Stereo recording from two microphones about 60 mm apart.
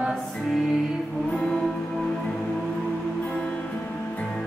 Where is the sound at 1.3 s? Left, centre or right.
Centre.